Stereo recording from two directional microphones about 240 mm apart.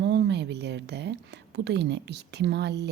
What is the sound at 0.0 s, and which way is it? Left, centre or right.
A woman's voice, right.